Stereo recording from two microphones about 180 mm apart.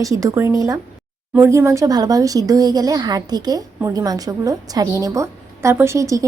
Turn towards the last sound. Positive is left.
turn(degrees=-15)  # may be behind; listen again after turning